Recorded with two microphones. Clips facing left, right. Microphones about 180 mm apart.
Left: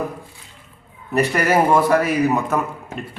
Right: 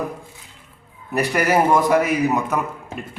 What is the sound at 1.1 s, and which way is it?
A man's voice, 10° right (ahead or behind).